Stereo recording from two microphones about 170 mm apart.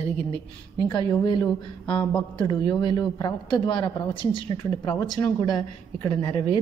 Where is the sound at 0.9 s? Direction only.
25° left (ahead or behind).